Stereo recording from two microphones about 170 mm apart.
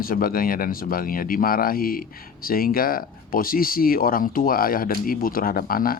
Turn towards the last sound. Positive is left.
turn(degrees=55)  # may be behind; listen again after turning